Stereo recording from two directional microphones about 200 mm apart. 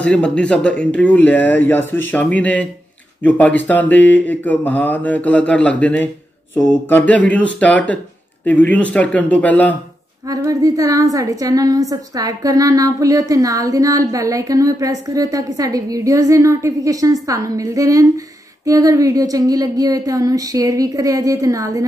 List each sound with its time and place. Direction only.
0.0 s speech: 5° left (ahead or behind)
10.2 s a woman's voice: 15° right (ahead or behind)